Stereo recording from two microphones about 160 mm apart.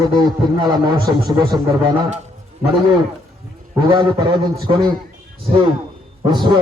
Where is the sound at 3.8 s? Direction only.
25° right (ahead or behind).